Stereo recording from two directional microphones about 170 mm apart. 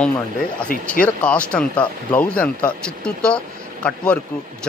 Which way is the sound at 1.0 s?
5° left (ahead or behind).